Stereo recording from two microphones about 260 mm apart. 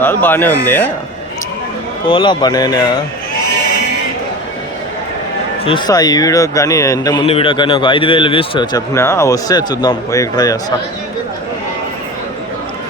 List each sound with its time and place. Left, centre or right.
0.0 s a man's voice: centre
2.0 s a man's voice: centre
5.6 s a man's voice: centre